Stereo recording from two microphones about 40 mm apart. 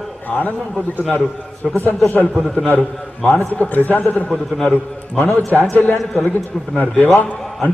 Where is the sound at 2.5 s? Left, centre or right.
Left.